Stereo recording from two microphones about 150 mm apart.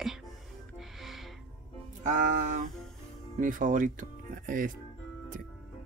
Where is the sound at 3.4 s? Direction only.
60° right (ahead or behind).